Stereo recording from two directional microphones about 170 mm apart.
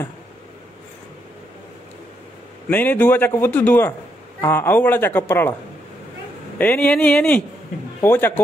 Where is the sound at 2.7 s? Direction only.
10° left (ahead or behind).